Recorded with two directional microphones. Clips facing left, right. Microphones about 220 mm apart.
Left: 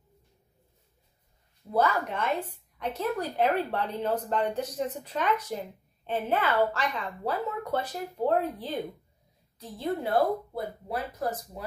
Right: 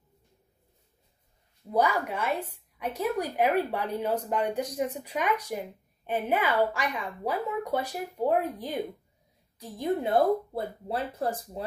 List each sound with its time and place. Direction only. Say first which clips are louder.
1.7 s a woman's voice: even; 15° right (ahead or behind); by 11.6 s 30° right (ahead or behind)